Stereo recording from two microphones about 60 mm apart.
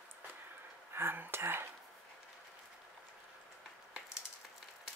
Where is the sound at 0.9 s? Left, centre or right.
Right.